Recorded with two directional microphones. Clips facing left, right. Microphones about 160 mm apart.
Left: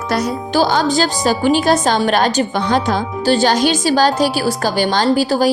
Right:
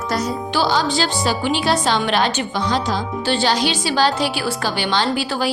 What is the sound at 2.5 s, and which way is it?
Speech, 55° left (ahead or behind).